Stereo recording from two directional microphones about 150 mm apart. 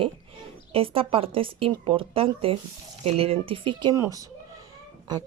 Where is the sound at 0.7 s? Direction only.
40° right (ahead or behind).